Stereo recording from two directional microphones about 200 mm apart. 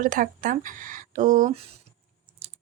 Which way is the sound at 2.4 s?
30° right (ahead or behind).